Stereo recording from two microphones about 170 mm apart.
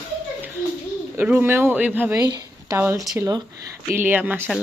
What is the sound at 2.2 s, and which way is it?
Speech, 20° right (ahead or behind).